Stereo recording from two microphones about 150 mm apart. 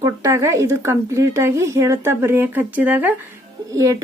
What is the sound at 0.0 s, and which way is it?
Speech, 20° right (ahead or behind).